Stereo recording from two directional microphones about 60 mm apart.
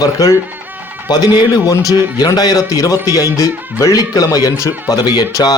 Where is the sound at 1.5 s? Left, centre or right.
Left.